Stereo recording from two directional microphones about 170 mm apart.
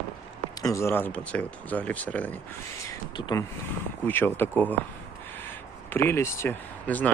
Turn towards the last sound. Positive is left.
turn(degrees=10)  # may be behind; listen again after turning